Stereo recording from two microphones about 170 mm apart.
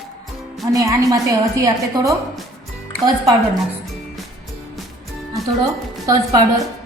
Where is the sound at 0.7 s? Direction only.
20° right (ahead or behind).